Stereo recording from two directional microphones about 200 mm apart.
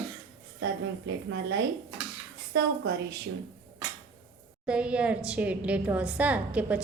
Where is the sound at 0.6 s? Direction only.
60° right (ahead or behind).